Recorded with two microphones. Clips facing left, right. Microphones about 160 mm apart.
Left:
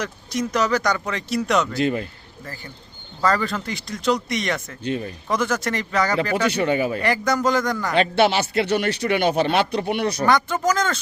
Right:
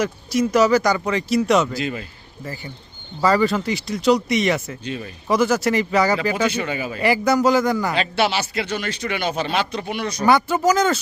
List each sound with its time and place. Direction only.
0.0 s speech: 5° right (ahead or behind)
3.2 s speech: 5° right (ahead or behind)
6.3 s speech: 60° left (ahead or behind)
7.0 s speech: 5° right (ahead or behind)
8.1 s speech: 50° left (ahead or behind)
10.2 s speech: 10° right (ahead or behind)